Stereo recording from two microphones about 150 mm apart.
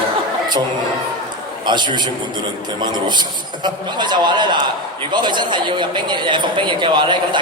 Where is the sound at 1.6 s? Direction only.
30° right (ahead or behind).